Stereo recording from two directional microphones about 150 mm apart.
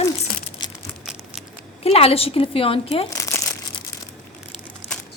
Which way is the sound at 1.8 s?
40° left (ahead or behind).